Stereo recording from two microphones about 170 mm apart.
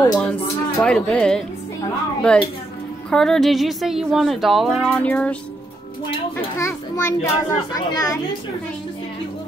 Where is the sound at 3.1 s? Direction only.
5° left (ahead or behind).